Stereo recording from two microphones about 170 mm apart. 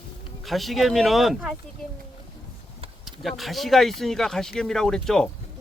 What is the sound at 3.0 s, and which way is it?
Speech, centre (ahead or behind).